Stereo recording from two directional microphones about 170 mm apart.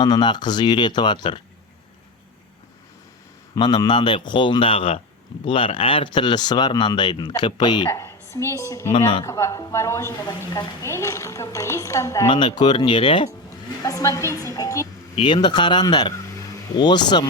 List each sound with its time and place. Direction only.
0.0 s speech: 25° left (ahead or behind)
3.5 s speech: 25° left (ahead or behind)
12.3 s speech: 30° left (ahead or behind)
13.8 s speech: 20° left (ahead or behind)